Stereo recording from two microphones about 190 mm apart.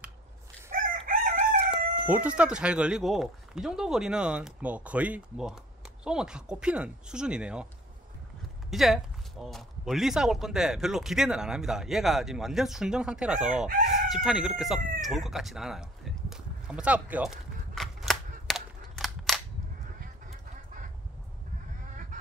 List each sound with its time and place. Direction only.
0.7 s crowing: 45° right (ahead or behind)
1.7 s speech: 5° right (ahead or behind)
8.6 s speech: centre (ahead or behind)
13.7 s chicken: 40° right (ahead or behind)
14.1 s chicken: centre (ahead or behind)